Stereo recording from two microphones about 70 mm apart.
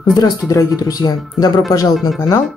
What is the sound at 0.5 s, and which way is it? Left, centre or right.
Speech, left.